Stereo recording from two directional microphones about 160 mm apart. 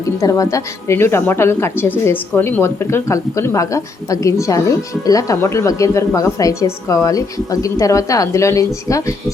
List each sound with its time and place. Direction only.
0.0 s a woman's voice: 20° left (ahead or behind)